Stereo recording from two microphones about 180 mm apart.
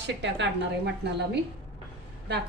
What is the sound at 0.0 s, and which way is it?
A woman's voice, 75° right (ahead or behind).